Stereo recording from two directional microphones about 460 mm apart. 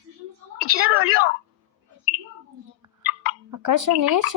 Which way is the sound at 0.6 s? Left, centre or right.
Right.